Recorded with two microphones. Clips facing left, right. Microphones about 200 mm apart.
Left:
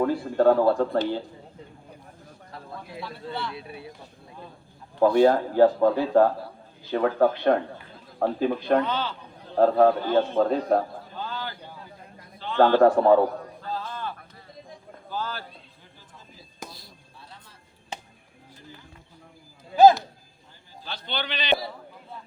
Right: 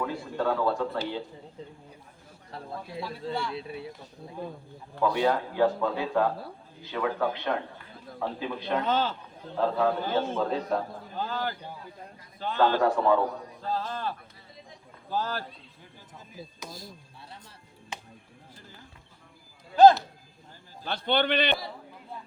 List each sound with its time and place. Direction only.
0.0 s a man's voice: 50° left (ahead or behind)
3.5 s speech: 25° right (ahead or behind)
4.9 s a man's voice: 40° left (ahead or behind)
8.9 s speech: 45° right (ahead or behind)
9.6 s a man's voice: 50° left (ahead or behind)
11.2 s a sound: 45° right (ahead or behind)
12.5 s a man's voice: 50° left (ahead or behind)
13.7 s a sound: 40° right (ahead or behind)
15.1 s speech: 40° right (ahead or behind)
16.6 s speech: 45° right (ahead or behind)
19.7 s speech: 5° left (ahead or behind)
20.8 s a man's voice: 55° right (ahead or behind)